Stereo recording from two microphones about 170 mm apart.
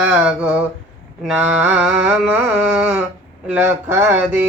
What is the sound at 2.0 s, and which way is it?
Mantra, 10° right (ahead or behind).